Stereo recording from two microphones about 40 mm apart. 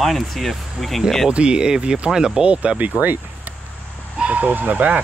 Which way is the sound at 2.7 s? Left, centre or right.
Right.